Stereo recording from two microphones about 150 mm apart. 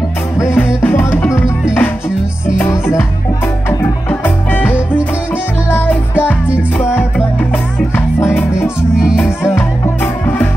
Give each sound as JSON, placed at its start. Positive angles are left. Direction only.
{"t": 0.4, "sound": "music", "side_deg": 15}
{"t": 8.2, "sound": "music", "side_deg": 15}
{"t": 8.9, "sound": "music", "side_deg": -5}